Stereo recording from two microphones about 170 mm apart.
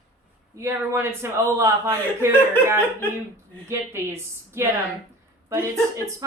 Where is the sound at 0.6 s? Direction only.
15° right (ahead or behind).